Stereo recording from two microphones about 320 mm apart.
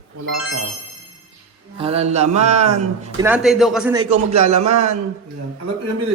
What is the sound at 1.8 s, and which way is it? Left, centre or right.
Mantra, centre.